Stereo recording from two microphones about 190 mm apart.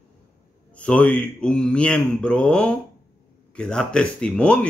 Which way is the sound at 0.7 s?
5° left (ahead or behind).